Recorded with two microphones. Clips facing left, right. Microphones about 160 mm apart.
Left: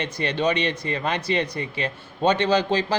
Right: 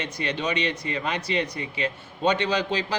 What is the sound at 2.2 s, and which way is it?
Speech, 30° left (ahead or behind).